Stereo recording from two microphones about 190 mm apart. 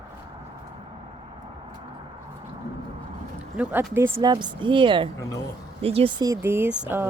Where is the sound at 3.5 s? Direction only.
10° right (ahead or behind); by 6.1 s 30° right (ahead or behind).